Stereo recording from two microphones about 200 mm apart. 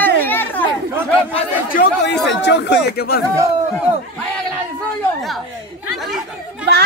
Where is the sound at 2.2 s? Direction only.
60° left (ahead or behind).